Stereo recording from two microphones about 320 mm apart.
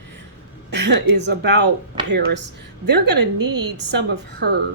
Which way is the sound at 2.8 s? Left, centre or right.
Right.